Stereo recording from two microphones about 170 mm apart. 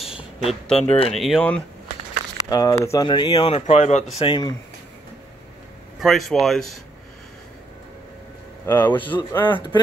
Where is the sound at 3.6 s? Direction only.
45° left (ahead or behind).